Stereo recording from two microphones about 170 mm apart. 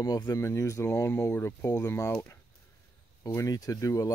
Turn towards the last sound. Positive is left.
turn(degrees=20)  # may be behind; listen again after turning